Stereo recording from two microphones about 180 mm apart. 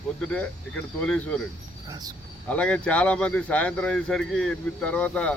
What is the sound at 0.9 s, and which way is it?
Speech, 5° left (ahead or behind).